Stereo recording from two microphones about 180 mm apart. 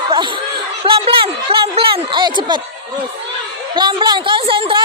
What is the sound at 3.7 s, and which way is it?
A woman's voice, 25° right (ahead or behind).